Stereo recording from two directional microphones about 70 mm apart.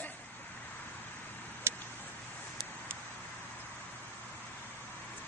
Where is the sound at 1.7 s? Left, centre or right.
Right.